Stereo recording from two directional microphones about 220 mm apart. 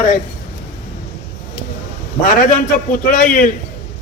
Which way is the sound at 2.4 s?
40° left (ahead or behind).